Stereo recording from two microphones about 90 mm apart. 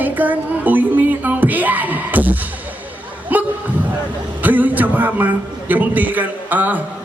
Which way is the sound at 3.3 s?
20° right (ahead or behind).